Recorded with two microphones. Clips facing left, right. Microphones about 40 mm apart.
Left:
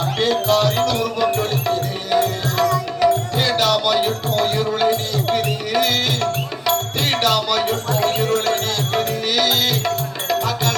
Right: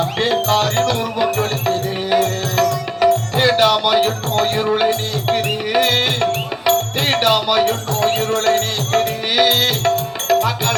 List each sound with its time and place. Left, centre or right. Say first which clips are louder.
0.2 s music: even; right